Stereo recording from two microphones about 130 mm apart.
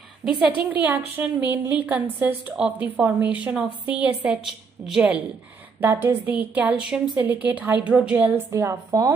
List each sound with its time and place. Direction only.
0.2 s a woman's voice: 10° right (ahead or behind)
5.8 s a woman's voice: 20° right (ahead or behind)
8.5 s a woman's voice: 25° right (ahead or behind)